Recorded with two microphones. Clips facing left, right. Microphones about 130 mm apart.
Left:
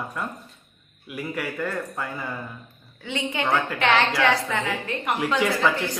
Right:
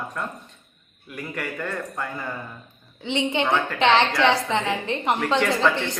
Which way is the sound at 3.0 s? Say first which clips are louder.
Right 3 dB; 20° right (ahead or behind).